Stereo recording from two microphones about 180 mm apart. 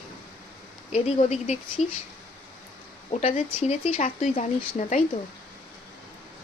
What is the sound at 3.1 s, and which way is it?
Speech, 35° left (ahead or behind).